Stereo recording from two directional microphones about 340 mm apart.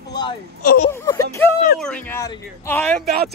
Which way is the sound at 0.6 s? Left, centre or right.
Left.